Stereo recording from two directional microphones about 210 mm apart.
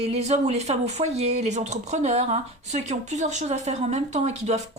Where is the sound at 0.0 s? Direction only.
30° right (ahead or behind).